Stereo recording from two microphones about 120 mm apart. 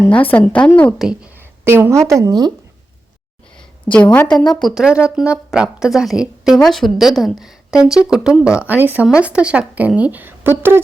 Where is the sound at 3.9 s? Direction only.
10° left (ahead or behind).